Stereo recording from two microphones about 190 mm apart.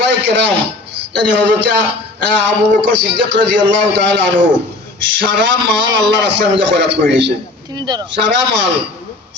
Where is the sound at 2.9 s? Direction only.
65° right (ahead or behind).